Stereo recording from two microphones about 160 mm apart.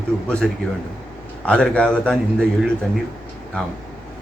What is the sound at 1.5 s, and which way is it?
Speech, 5° left (ahead or behind).